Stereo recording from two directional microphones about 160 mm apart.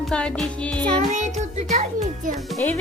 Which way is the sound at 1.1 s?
45° right (ahead or behind).